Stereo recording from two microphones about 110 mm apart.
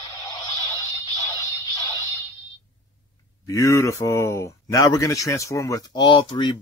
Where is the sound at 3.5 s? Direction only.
30° left (ahead or behind).